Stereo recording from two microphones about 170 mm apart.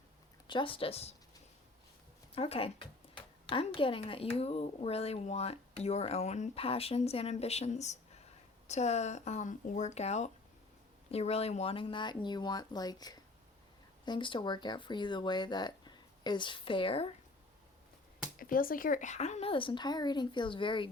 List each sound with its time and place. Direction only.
0.4 s speech: 30° left (ahead or behind)
2.3 s speech: 35° left (ahead or behind)
18.3 s speech: 55° left (ahead or behind); by 20.8 s 30° left (ahead or behind)